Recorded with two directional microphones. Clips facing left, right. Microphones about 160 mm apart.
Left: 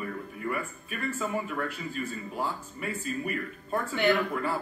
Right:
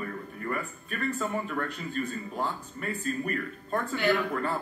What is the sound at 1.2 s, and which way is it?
Speech, 10° left (ahead or behind).